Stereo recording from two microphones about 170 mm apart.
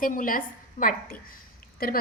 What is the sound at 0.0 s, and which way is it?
A woman's voice, 50° left (ahead or behind).